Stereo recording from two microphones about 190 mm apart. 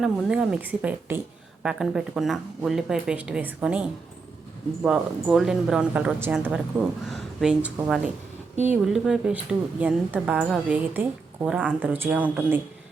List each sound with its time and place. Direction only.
0.0 s a woman's voice: 5° right (ahead or behind)